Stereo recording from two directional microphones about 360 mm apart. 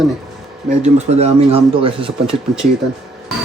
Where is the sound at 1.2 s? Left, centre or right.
Centre.